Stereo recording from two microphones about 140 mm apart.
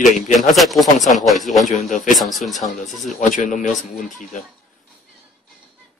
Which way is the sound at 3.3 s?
65° left (ahead or behind).